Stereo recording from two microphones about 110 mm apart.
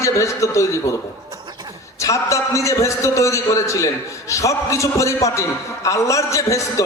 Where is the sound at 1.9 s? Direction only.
30° left (ahead or behind).